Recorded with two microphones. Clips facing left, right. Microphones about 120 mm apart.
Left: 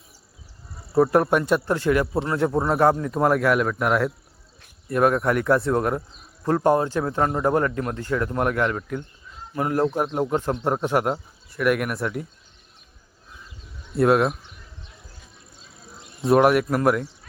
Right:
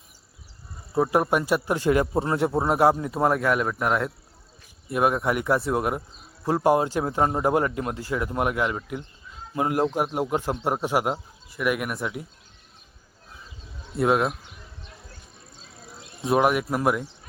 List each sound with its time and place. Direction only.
0.9 s a man's voice: centre (ahead or behind)
9.6 s a man's voice: 20° right (ahead or behind); by 12.2 s 5° right (ahead or behind)
13.9 s a man's voice: centre (ahead or behind)
16.2 s a man's voice: centre (ahead or behind)